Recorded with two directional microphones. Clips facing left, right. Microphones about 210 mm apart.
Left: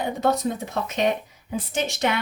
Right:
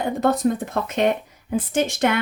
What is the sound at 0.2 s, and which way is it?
Speech, 55° right (ahead or behind).